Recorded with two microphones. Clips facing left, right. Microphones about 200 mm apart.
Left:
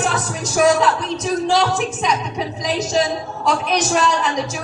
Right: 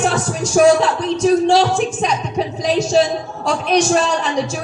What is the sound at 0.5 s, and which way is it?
Speech, 30° right (ahead or behind).